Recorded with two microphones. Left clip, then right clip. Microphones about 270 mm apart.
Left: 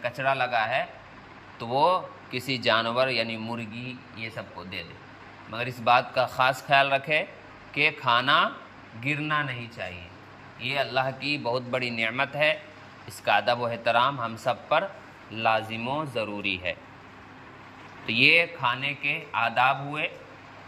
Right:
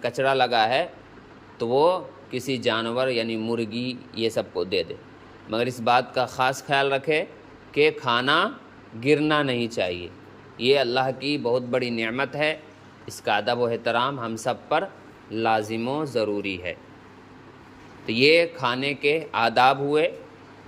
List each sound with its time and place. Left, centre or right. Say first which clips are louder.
0.0 s speech: right 4 dB; centre
18.0 s speech: right 2 dB; centre